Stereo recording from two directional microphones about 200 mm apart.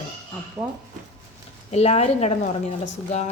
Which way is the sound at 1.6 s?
30° left (ahead or behind).